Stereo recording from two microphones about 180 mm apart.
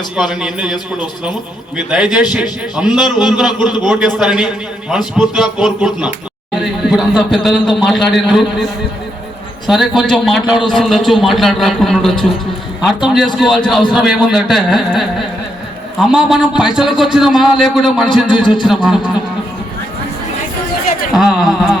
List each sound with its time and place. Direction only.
0.2 s a man's voice: centre (ahead or behind)
9.6 s a man's voice: centre (ahead or behind)
18.4 s a man's voice: 25° left (ahead or behind)
21.1 s a man's voice: centre (ahead or behind)